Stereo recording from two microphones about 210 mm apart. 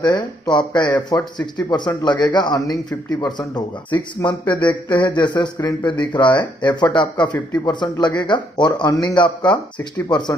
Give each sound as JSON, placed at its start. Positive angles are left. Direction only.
{"t": 0.0, "sound": "speech", "side_deg": 20}